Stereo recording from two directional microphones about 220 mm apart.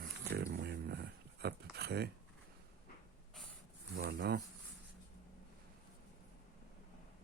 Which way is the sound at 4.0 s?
50° right (ahead or behind).